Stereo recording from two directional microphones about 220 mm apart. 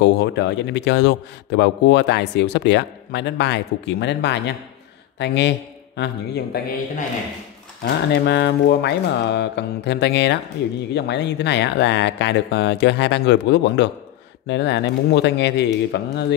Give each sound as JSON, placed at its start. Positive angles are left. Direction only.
{"t": 0.0, "sound": "a man's voice", "side_deg": 50}
{"t": 7.8, "sound": "a man's voice", "side_deg": 50}